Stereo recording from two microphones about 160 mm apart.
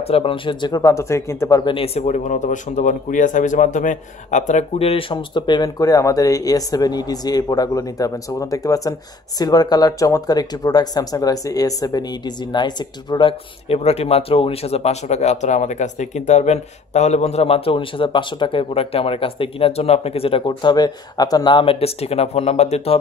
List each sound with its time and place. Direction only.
0.0 s speech: 35° left (ahead or behind)